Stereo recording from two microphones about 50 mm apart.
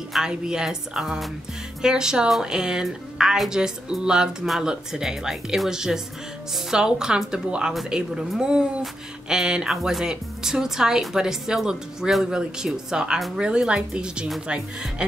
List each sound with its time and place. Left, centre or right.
0.1 s a woman's voice: centre